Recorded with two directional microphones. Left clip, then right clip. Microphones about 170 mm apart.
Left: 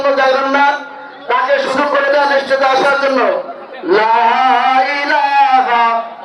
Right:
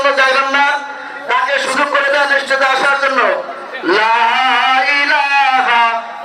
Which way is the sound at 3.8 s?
10° left (ahead or behind).